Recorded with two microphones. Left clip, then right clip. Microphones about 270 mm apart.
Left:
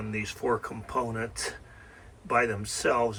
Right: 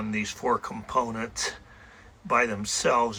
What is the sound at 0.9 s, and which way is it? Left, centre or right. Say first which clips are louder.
Speech: right 4 dB; centre.